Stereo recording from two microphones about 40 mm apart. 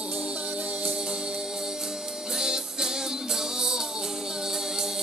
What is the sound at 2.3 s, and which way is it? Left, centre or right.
Music, centre.